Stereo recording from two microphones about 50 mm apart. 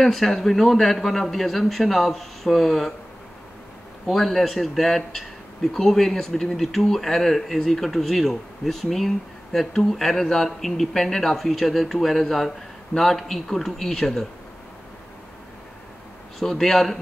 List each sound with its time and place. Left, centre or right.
0.0 s speech: centre
4.1 s speech: centre
16.3 s a man's voice: centre